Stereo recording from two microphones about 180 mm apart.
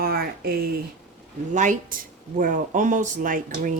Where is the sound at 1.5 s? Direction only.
45° right (ahead or behind).